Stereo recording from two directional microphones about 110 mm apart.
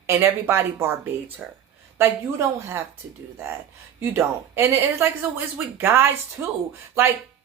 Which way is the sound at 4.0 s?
25° right (ahead or behind).